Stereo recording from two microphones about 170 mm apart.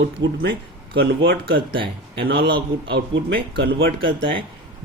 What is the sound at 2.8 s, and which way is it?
Speech, 85° right.